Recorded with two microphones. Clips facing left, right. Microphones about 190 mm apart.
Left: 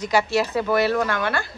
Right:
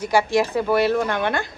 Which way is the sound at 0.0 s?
10° right (ahead or behind).